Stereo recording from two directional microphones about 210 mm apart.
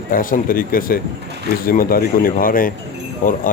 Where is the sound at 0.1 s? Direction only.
40° left (ahead or behind).